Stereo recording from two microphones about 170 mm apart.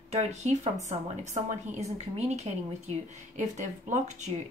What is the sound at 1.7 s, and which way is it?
Speech, 40° right (ahead or behind).